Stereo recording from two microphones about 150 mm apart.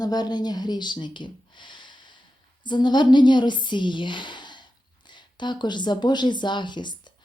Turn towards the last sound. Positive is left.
turn(degrees=30)  # may be behind; listen again after turning